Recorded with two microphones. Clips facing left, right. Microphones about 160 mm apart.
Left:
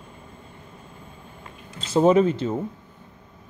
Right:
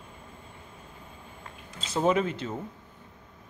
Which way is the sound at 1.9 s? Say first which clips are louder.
Left 8 dB; 35° left (ahead or behind).